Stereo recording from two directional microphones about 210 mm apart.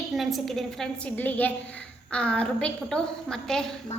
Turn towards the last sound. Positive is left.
turn(degrees=0)  # may be behind; listen again after turning